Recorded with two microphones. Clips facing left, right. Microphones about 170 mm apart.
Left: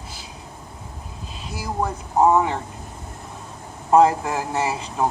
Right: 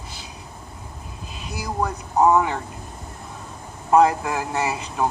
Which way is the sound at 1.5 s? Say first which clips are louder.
Even; 30° left (ahead or behind).